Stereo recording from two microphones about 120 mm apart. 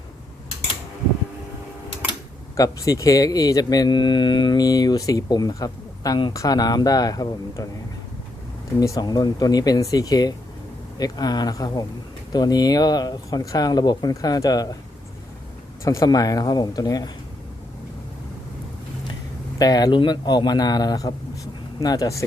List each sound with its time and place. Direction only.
2.6 s speech: 30° left (ahead or behind)
8.8 s speech: 30° left (ahead or behind)
15.8 s speech: 25° left (ahead or behind)
19.5 s speech: 35° left (ahead or behind)